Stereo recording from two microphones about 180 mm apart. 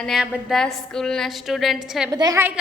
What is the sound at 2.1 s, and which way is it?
Speech, 20° right (ahead or behind).